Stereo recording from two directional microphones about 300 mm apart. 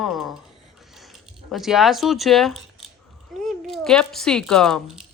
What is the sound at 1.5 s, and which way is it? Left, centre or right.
Speech, centre.